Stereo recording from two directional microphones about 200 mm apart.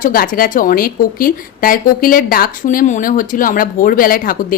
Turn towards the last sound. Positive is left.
turn(degrees=45)  # may be behind; listen again after turning